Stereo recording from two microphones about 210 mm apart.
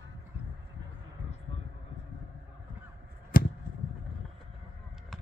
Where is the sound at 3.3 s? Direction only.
45° left (ahead or behind).